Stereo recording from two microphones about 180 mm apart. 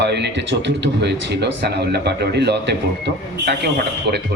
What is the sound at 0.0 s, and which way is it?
A man's voice, 70° right (ahead or behind).